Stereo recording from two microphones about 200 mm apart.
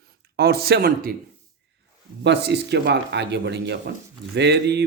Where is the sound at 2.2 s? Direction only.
60° right (ahead or behind).